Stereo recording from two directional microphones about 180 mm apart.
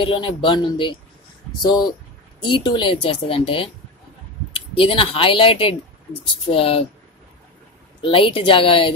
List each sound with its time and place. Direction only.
0.0 s a woman's voice: 30° left (ahead or behind)
8.0 s a woman's voice: 30° left (ahead or behind)